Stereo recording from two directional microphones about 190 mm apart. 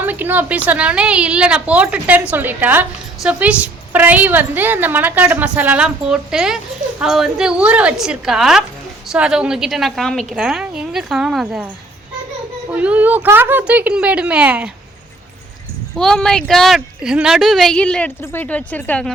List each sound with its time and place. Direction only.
0.0 s a woman's voice: 10° right (ahead or behind)
12.7 s a woman's voice: 5° right (ahead or behind)
16.0 s speech: 5° left (ahead or behind)